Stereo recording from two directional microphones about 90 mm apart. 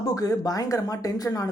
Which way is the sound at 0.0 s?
45° left (ahead or behind).